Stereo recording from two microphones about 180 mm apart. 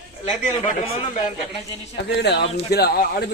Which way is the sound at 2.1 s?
65° left (ahead or behind).